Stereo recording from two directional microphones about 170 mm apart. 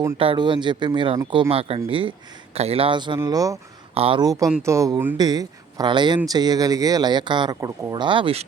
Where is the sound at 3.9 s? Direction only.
35° right (ahead or behind).